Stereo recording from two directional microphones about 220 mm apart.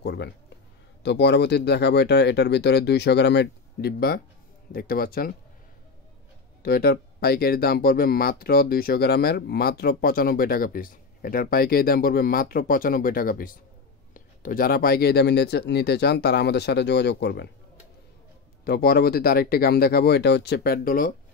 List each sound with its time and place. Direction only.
0.0 s speech: 50° left (ahead or behind)
6.6 s speech: 45° left (ahead or behind)
18.6 s speech: 45° left (ahead or behind)